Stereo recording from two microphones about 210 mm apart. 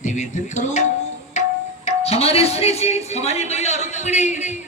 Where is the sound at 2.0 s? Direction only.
30° left (ahead or behind).